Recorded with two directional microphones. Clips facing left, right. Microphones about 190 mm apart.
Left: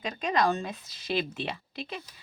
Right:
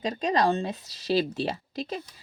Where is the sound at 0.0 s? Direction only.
40° right (ahead or behind).